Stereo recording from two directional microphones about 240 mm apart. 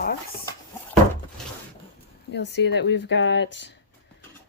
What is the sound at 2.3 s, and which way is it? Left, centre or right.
Speech, left.